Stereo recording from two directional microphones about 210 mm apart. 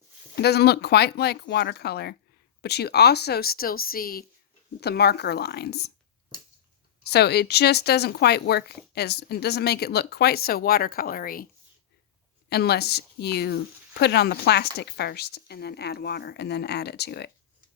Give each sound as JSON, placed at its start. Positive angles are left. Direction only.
{"t": 0.3, "sound": "speech", "side_deg": 50}
{"t": 7.0, "sound": "speech", "side_deg": 50}
{"t": 12.5, "sound": "speech", "side_deg": 50}